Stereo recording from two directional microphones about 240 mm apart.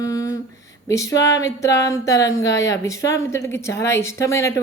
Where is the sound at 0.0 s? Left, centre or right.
Centre.